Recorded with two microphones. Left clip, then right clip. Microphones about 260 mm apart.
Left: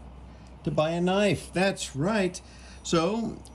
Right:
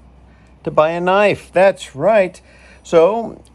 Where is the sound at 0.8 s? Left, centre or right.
Centre.